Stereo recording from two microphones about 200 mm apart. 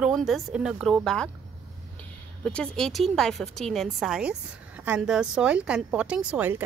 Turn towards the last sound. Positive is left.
turn(degrees=-5)  # may be behind; listen again after turning